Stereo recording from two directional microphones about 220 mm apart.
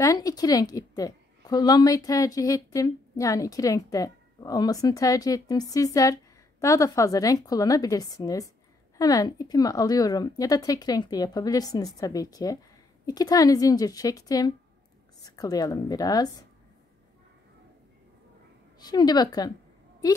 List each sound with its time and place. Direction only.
0.0 s a woman's voice: 15° left (ahead or behind)
18.8 s a woman's voice: 20° left (ahead or behind)